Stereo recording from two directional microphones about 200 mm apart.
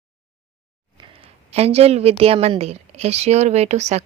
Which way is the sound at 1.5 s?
30° right (ahead or behind).